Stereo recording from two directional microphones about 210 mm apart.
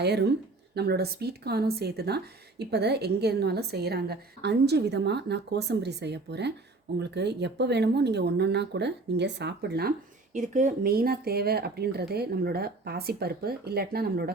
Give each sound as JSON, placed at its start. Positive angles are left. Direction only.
{"t": 0.0, "sound": "speech", "side_deg": -50}
{"t": 10.3, "sound": "speech", "side_deg": -35}